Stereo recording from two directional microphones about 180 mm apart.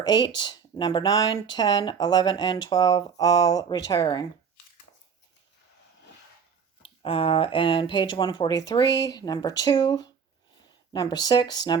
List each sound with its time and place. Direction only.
0.0 s speech: 25° left (ahead or behind)
6.8 s speech: 30° left (ahead or behind)